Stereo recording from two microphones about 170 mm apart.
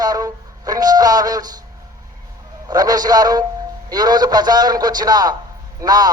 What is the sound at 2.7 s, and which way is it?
A man's voice, 20° right (ahead or behind).